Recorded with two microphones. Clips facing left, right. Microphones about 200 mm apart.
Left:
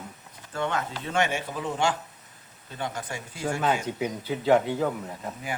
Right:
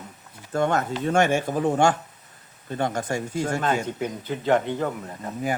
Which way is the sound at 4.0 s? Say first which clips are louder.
Even; 5° left (ahead or behind).